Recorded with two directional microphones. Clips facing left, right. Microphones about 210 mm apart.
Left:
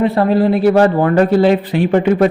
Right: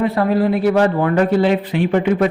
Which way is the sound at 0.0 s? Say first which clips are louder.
Left 3 dB; 30° left (ahead or behind).